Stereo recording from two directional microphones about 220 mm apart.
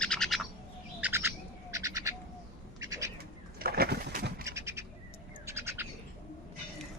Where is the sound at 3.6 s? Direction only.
45° right (ahead or behind).